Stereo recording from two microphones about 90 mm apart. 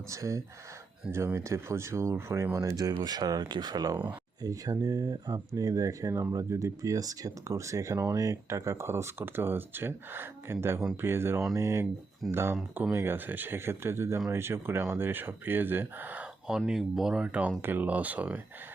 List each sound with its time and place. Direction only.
0.1 s speech: 35° right (ahead or behind)
16.5 s speech: 5° right (ahead or behind)